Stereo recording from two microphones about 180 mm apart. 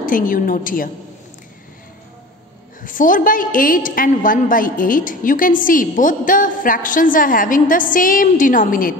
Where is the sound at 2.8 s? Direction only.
50° left (ahead or behind).